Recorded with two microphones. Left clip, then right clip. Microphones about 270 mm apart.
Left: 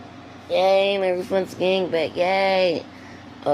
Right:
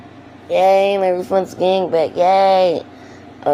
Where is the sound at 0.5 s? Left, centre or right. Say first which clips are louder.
Right 5 dB; centre.